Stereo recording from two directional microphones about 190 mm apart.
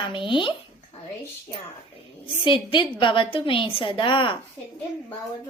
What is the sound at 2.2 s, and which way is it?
A woman's voice, 25° left (ahead or behind).